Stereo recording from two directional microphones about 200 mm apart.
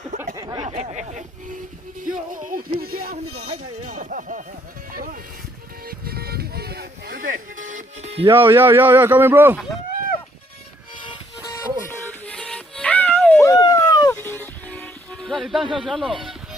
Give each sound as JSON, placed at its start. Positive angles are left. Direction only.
{"t": 0.3, "sound": "a sound", "side_deg": -20}
{"t": 0.6, "sound": "speech", "side_deg": -35}
{"t": 2.0, "sound": "music", "side_deg": -40}
{"t": 3.2, "sound": "speech", "side_deg": -90}
{"t": 3.8, "sound": "speech", "side_deg": -40}
{"t": 6.1, "sound": "music", "side_deg": -50}
{"t": 8.3, "sound": "speech", "side_deg": -10}
{"t": 11.9, "sound": "music", "side_deg": 5}
{"t": 15.7, "sound": "speech", "side_deg": 0}